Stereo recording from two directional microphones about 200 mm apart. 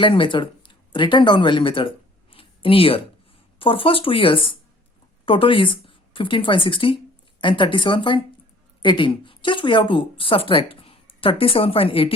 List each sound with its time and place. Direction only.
0.0 s speech: 25° left (ahead or behind)
2.3 s a sound: 25° left (ahead or behind)
3.6 s a woman's voice: 25° left (ahead or behind)